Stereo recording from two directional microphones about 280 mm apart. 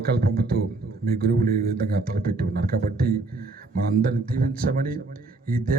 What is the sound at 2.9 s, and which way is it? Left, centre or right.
Speech, right.